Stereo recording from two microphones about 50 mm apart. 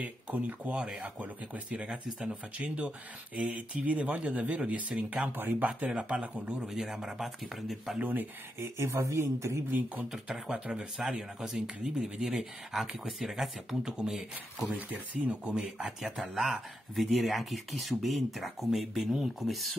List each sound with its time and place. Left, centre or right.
0.0 s speech: right
1.7 s speech: centre
5.3 s speech: right
5.9 s speech: centre
6.6 s speech: centre
8.0 s speech: right
8.5 s speech: right
10.1 s speech: centre
14.9 s speech: right
15.5 s speech: centre